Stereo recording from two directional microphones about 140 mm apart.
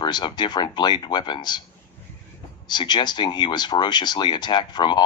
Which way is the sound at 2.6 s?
30° left (ahead or behind).